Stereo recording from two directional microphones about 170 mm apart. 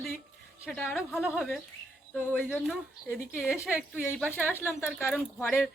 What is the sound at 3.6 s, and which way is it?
A woman's voice, 15° left (ahead or behind).